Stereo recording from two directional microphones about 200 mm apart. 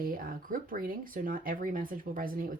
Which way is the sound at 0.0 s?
45° right (ahead or behind).